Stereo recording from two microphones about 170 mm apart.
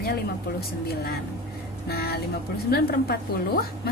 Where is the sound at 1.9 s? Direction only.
65° left (ahead or behind).